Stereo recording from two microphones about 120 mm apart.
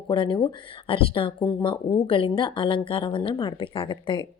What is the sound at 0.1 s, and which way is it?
A woman's voice, 45° left (ahead or behind).